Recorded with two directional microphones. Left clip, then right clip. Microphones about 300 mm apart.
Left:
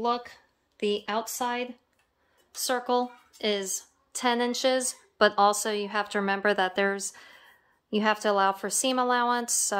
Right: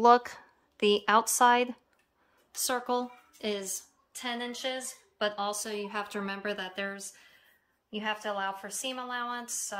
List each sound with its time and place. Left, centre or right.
0.0 s speech: centre
2.5 s a woman's voice: centre